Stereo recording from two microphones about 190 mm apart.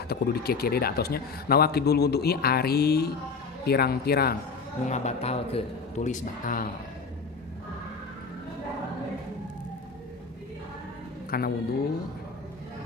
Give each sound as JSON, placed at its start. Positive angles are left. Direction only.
{"t": 0.1, "sound": "speech", "side_deg": 55}
{"t": 4.9, "sound": "a man's voice", "side_deg": 35}
{"t": 11.3, "sound": "speech", "side_deg": 50}